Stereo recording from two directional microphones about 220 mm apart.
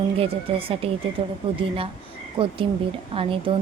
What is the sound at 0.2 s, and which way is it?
Speech, 25° right (ahead or behind).